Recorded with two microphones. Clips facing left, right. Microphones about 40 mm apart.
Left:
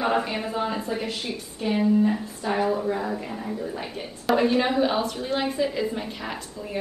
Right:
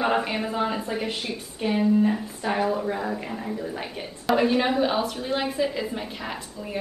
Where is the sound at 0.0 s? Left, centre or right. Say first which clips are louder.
Even; centre.